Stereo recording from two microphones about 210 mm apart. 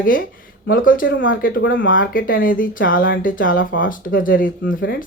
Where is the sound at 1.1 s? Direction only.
65° left (ahead or behind).